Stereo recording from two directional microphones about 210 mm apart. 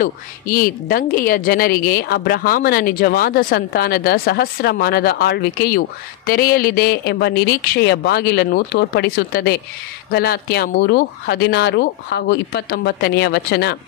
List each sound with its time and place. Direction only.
0.0 s a woman's voice: 40° left (ahead or behind)